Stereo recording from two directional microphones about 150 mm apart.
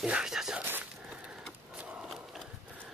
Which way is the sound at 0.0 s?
5° right (ahead or behind).